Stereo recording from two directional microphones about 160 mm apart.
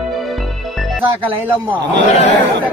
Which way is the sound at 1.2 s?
10° right (ahead or behind).